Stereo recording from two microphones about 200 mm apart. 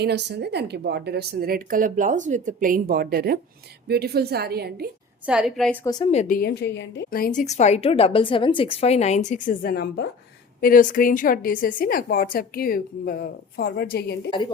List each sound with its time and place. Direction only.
0.0 s a woman's voice: 55° right (ahead or behind)
5.2 s a woman's voice: 5° right (ahead or behind)
5.8 s speech: 20° left (ahead or behind)
6.1 s a woman's voice: 40° left (ahead or behind)
14.3 s speech: 25° left (ahead or behind)